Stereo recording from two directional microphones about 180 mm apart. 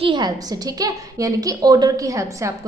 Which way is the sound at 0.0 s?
25° right (ahead or behind).